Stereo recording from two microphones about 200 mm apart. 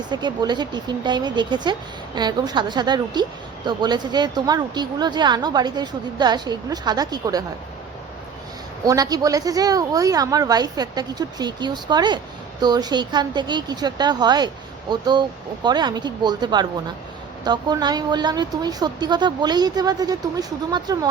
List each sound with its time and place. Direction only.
0.1 s a woman's voice: 20° right (ahead or behind)
8.8 s a woman's voice: 20° right (ahead or behind)